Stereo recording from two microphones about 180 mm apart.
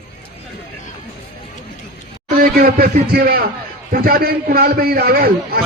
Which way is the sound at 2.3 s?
55° right (ahead or behind).